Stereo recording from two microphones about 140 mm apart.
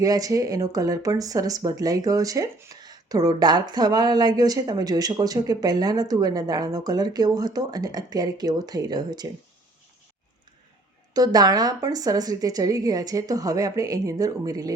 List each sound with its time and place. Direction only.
0.0 s speech: 25° right (ahead or behind)
11.1 s speech: 25° right (ahead or behind)